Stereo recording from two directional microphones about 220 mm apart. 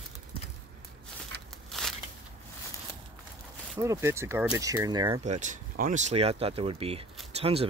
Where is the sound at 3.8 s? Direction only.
10° right (ahead or behind).